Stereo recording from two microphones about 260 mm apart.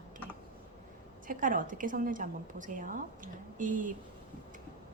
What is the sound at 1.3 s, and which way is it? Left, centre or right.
A woman's voice, right.